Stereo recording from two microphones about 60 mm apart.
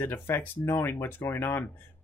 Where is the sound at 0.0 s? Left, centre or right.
Left.